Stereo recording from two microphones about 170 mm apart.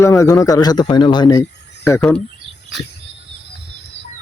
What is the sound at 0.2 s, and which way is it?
Speech, 20° left (ahead or behind).